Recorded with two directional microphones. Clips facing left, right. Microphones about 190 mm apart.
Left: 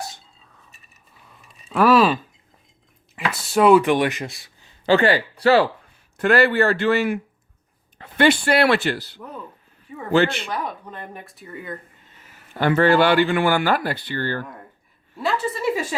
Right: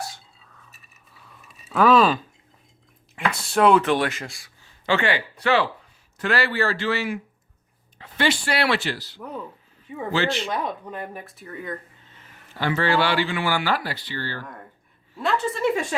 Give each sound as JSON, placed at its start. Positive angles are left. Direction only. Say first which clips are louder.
{"t": 1.7, "sound": "speech", "louder": "left 1 dB", "side_deg": 10}
{"t": 3.2, "sound": "speech", "louder": "left 2 dB", "side_deg": 0}
{"t": 4.9, "sound": "speech", "louder": "left 6 dB", "side_deg": 35}
{"t": 6.1, "sound": "speech", "louder": "left 7 dB", "side_deg": 50}
{"t": 10.9, "sound": "speech", "louder": "right 3 dB", "side_deg": -5}
{"t": 12.5, "sound": "speech", "louder": "left 6 dB", "side_deg": 50}
{"t": 15.2, "sound": "speech", "louder": "even", "side_deg": 0}